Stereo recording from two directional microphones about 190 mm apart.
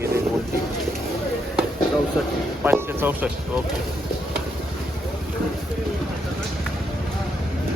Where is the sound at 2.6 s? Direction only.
10° right (ahead or behind).